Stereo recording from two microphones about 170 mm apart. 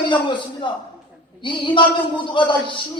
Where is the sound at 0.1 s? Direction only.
30° left (ahead or behind).